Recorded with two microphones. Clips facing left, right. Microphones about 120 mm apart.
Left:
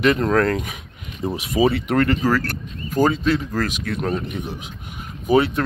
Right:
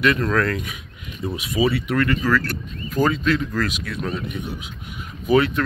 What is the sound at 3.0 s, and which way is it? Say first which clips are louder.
Speech: left 2 dB; 30° left (ahead or behind).